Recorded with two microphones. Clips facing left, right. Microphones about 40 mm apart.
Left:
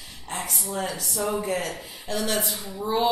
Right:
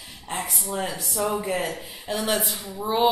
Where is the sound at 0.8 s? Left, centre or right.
Right.